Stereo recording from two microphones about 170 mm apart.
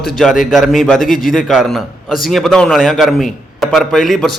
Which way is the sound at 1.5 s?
Centre (ahead or behind).